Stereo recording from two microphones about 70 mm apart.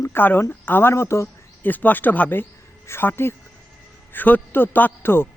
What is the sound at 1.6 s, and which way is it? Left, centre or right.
A man's voice, left.